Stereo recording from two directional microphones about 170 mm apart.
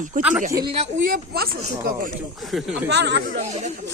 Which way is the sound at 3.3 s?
45° right (ahead or behind).